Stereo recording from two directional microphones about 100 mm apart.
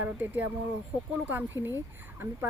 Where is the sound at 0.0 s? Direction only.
15° right (ahead or behind).